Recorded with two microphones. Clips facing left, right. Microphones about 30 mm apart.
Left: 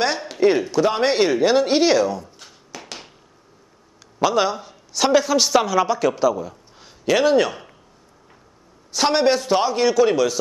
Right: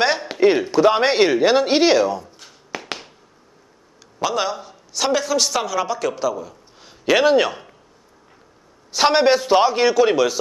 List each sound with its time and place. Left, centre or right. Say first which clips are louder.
0.3 s speech: right 1 dB; centre
2.7 s a sound: right 7 dB; right
4.2 s a man's voice: left 3 dB; centre
7.1 s speech: right 1 dB; centre
8.9 s speech: right 2 dB; centre